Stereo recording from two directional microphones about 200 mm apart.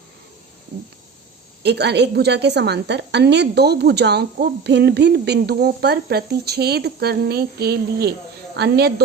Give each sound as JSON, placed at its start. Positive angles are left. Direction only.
{"t": 1.6, "sound": "a woman's voice", "side_deg": -55}